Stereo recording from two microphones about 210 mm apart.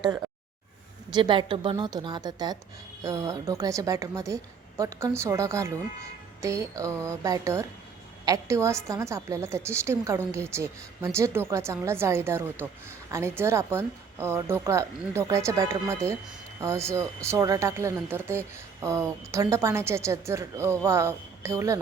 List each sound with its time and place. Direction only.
1.1 s a woman's voice: 20° right (ahead or behind)